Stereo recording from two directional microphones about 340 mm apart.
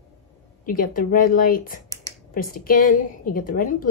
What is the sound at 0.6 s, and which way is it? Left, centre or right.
A woman's voice, left.